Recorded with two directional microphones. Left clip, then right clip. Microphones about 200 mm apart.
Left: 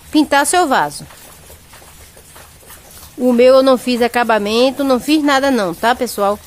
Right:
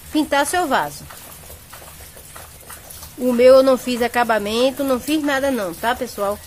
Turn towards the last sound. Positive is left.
turn(degrees=40)  # may be behind; listen again after turning